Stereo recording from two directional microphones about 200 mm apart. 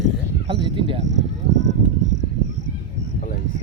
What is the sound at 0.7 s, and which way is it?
Speech, 25° right (ahead or behind).